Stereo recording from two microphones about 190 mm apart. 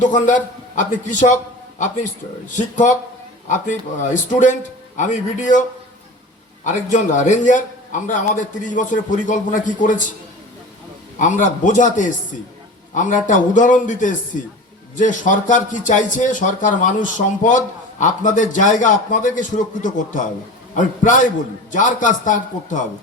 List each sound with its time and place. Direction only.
0.0 s a man's voice: 40° left (ahead or behind)
3.5 s a man's voice: 40° left (ahead or behind)
6.7 s a man's voice: 40° left (ahead or behind)
11.2 s a man's voice: 40° left (ahead or behind)